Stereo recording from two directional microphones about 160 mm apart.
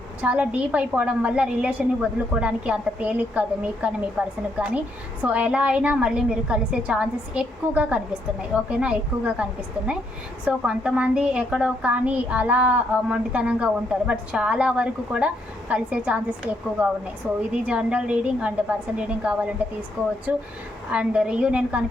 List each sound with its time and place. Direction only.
0.2 s a woman's voice: 10° right (ahead or behind)